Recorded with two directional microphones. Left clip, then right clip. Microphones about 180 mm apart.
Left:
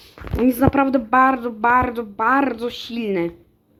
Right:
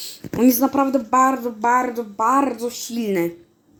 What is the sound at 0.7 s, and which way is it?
Speech, 20° left (ahead or behind).